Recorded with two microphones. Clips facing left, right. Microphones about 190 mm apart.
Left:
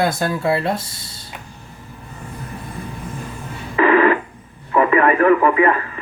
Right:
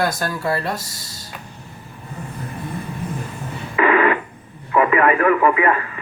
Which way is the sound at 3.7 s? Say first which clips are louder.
Left 3 dB; 35° left (ahead or behind).